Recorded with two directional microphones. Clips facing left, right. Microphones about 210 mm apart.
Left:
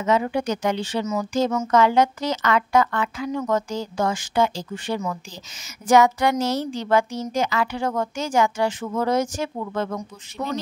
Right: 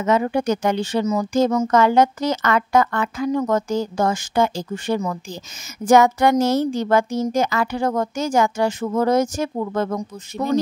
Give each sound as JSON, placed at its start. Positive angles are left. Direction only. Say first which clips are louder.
{"t": 0.0, "sound": "a woman's voice", "louder": "right 3 dB", "side_deg": -50}
{"t": 1.0, "sound": "a woman's voice", "louder": "right 4 dB", "side_deg": -35}